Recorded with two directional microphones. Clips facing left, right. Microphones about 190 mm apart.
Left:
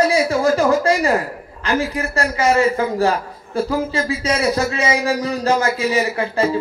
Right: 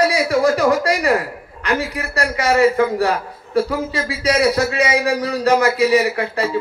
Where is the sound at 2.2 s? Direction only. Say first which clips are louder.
Right 1 dB; 35° left (ahead or behind).